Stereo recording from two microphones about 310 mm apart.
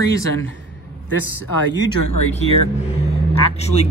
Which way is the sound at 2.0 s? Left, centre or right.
Left.